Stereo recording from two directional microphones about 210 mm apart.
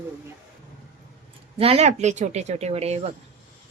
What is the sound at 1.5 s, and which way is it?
A woman's voice, 30° right (ahead or behind).